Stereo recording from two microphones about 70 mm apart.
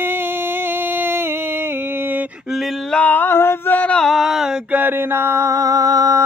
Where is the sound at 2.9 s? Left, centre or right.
Left.